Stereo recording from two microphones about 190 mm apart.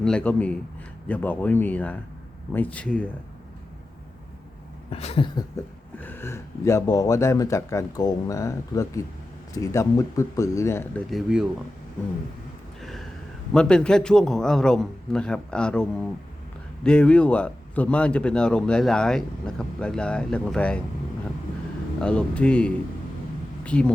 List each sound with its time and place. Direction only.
0.0 s speech: 5° left (ahead or behind)
4.9 s a sound: 30° left (ahead or behind)
6.0 s speech: 10° left (ahead or behind)
11.1 s speech: 5° right (ahead or behind)
12.8 s a sound: centre (ahead or behind)
13.5 s speech: 5° left (ahead or behind)
22.0 s speech: 5° left (ahead or behind)